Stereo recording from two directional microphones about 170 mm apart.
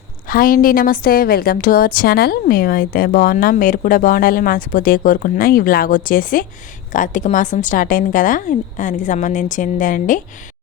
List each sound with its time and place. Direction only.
0.3 s a woman's voice: 55° left (ahead or behind)